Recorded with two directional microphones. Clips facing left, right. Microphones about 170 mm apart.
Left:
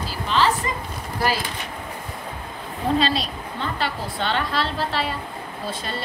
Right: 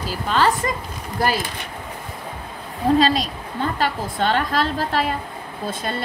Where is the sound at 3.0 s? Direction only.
45° right (ahead or behind).